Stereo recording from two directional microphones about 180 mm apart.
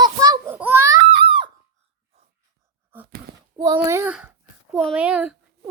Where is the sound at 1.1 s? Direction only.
30° right (ahead or behind).